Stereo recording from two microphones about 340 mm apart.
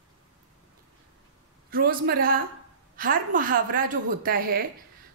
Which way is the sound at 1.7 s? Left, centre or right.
Right.